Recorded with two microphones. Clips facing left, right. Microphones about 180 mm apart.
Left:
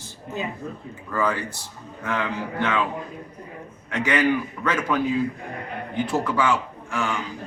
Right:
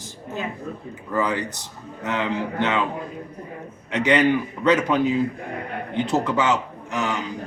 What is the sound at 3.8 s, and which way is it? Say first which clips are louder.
A man's voice: right 3 dB; 20° right (ahead or behind).